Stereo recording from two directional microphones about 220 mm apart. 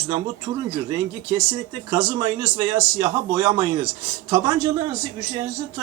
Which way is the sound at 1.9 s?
20° right (ahead or behind).